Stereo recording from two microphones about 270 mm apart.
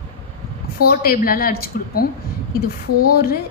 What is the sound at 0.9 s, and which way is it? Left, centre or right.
A woman's voice, left.